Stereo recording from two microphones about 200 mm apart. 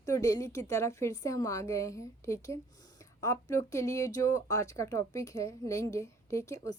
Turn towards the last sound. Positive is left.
turn(degrees=15)  # may be behind; listen again after turning